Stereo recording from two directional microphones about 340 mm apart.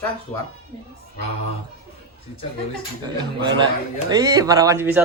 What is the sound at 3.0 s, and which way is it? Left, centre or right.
Speech, centre.